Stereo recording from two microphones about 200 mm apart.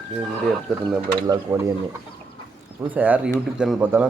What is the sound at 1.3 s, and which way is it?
Speech, 15° right (ahead or behind).